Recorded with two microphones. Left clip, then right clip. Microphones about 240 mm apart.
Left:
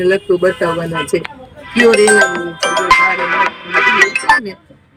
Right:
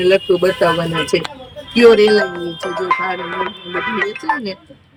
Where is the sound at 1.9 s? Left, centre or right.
Centre.